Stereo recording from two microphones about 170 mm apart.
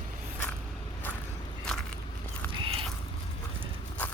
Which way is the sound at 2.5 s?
30° right (ahead or behind).